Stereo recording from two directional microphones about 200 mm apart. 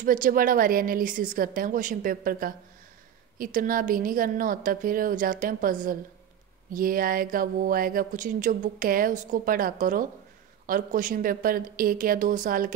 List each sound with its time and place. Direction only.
0.0 s speech: 45° right (ahead or behind)